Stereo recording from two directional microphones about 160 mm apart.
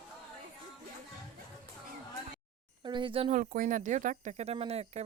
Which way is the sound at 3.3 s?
55° right (ahead or behind).